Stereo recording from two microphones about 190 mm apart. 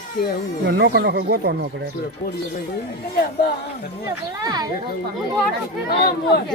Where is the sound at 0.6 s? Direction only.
60° right (ahead or behind).